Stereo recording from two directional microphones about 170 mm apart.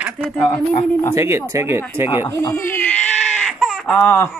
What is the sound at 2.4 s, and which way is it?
Speech, 15° left (ahead or behind).